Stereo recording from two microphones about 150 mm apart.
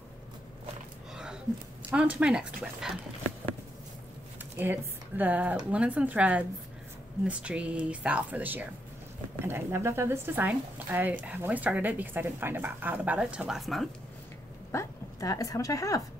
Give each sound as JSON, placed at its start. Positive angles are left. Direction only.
{"t": 1.1, "sound": "a sound", "side_deg": -5}
{"t": 1.9, "sound": "speech", "side_deg": -10}
{"t": 4.6, "sound": "speech", "side_deg": -10}
{"t": 14.7, "sound": "speech", "side_deg": 20}